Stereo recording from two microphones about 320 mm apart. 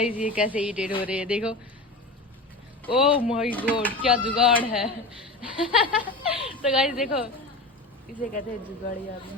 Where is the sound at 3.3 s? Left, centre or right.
Centre.